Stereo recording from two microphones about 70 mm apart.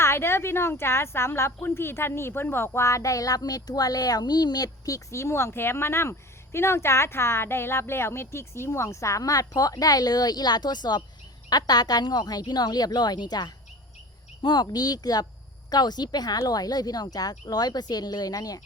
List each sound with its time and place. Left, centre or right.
0.0 s speech: left
11.4 s speech: left
15.7 s speech: left